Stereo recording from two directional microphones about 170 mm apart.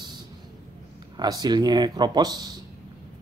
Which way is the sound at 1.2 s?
25° right (ahead or behind).